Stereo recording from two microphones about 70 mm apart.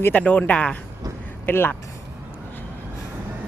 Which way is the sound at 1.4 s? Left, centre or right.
Left.